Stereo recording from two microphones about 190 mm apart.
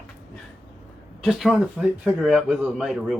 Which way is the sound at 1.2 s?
Centre (ahead or behind).